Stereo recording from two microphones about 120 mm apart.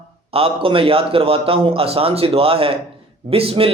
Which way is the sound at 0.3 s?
55° right (ahead or behind).